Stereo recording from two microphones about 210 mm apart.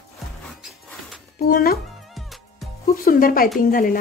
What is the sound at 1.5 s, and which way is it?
Speech, 45° left (ahead or behind).